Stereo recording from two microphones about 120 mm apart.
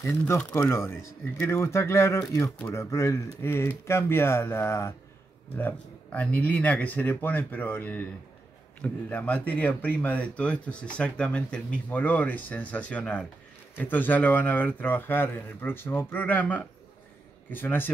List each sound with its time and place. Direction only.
0.0 s speech: 15° left (ahead or behind)